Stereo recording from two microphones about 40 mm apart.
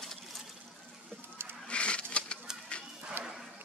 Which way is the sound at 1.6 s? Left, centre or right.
Left.